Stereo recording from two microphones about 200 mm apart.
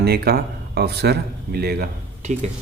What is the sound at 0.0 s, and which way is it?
Speech, 50° right (ahead or behind).